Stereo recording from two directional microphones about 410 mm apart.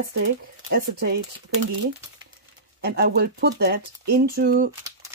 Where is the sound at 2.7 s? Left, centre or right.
Right.